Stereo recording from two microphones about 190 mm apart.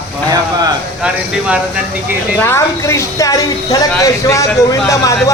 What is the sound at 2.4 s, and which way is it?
Speech, 15° left (ahead or behind).